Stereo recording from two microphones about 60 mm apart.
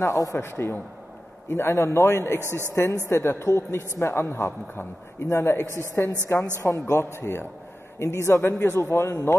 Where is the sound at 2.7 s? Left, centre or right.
Left.